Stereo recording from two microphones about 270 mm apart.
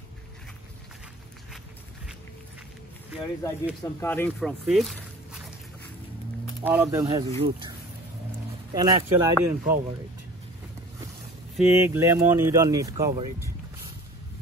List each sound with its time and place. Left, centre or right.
3.8 s speech: centre
6.6 s speech: centre
8.7 s speech: centre
11.5 s speech: centre